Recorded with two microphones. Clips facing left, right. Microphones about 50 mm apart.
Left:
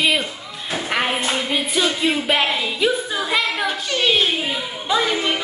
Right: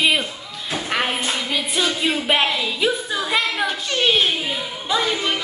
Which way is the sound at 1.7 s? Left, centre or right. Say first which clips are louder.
Left 1 dB; centre.